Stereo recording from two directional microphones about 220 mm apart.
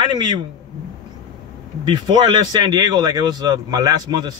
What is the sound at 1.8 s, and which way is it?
Speech, 20° right (ahead or behind).